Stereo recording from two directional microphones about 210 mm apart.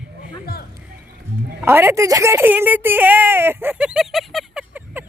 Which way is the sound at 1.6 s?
10° right (ahead or behind).